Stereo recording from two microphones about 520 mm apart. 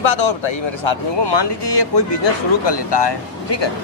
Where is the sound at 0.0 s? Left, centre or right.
Left.